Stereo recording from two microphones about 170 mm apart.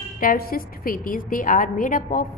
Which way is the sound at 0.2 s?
55° left (ahead or behind).